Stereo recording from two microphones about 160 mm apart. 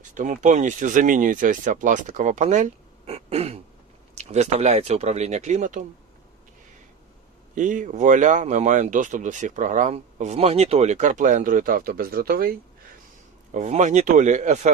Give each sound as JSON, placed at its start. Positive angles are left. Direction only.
{"t": 0.1, "sound": "speech", "side_deg": -50}
{"t": 3.1, "sound": "throat clearing", "side_deg": -40}
{"t": 4.2, "sound": "speech", "side_deg": -45}
{"t": 7.5, "sound": "speech", "side_deg": -55}
{"t": 13.5, "sound": "speech", "side_deg": -45}